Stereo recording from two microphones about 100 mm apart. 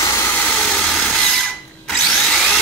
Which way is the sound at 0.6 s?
5° left (ahead or behind).